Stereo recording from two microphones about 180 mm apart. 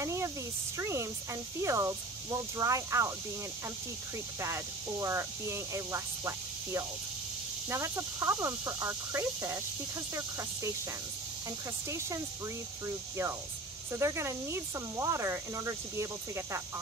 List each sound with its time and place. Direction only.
0.0 s a sound: 15° right (ahead or behind)
0.7 s speech: 15° right (ahead or behind)
4.4 s speech: 15° right (ahead or behind)
13.9 s speech: 15° right (ahead or behind)